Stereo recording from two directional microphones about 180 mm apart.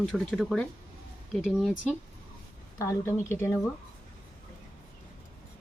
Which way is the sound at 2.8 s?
15° left (ahead or behind).